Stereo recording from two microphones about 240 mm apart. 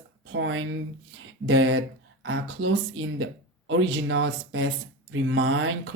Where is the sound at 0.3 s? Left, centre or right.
Right.